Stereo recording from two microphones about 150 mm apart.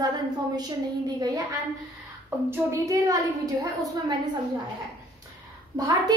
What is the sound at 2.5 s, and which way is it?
Speech, 20° right (ahead or behind).